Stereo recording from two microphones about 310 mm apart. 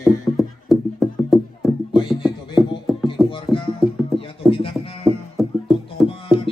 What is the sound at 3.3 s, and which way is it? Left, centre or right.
Music, centre.